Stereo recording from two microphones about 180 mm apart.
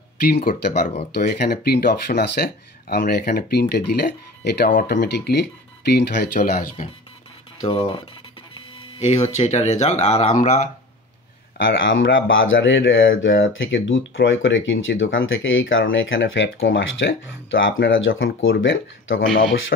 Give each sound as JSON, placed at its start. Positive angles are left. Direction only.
{"t": 0.2, "sound": "speech", "side_deg": 55}
{"t": 7.6, "sound": "speech", "side_deg": 30}
{"t": 11.5, "sound": "speech", "side_deg": 90}